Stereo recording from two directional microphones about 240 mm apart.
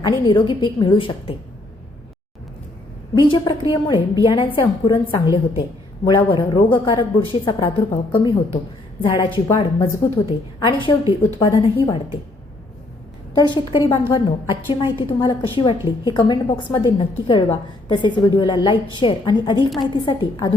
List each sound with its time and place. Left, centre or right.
0.0 s a woman's voice: centre
3.2 s a woman's voice: centre
13.3 s a woman's voice: centre